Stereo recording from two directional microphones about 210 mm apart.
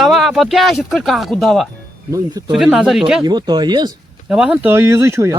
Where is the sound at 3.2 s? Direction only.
20° right (ahead or behind).